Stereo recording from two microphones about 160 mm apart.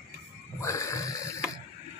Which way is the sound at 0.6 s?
20° left (ahead or behind).